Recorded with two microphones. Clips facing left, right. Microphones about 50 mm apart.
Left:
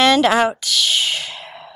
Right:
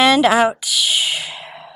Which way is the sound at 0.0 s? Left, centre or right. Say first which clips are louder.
Right 1 dB; centre.